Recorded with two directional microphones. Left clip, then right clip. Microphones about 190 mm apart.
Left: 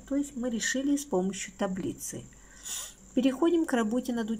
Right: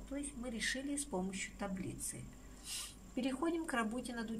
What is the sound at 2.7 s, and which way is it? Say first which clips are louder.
Speech: left 7 dB; 40° left (ahead or behind).